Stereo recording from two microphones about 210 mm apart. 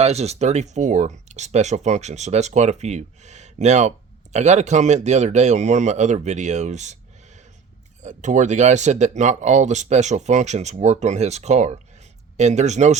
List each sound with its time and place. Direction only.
0.0 s speech: 30° right (ahead or behind)
8.0 s speech: 35° right (ahead or behind)